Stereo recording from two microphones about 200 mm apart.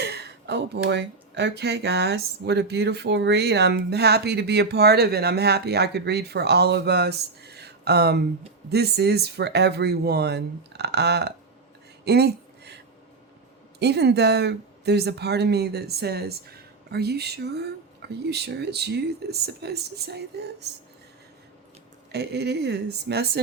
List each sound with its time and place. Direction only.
0.0 s speech: 55° right (ahead or behind)
12.0 s a sound: 55° right (ahead or behind)
13.7 s speech: 55° right (ahead or behind)
22.1 s speech: 55° right (ahead or behind)